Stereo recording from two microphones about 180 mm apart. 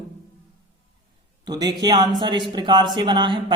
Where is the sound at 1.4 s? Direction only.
25° right (ahead or behind).